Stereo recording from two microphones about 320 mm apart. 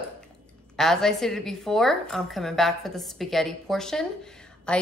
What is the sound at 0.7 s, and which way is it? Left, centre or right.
A woman's voice, centre.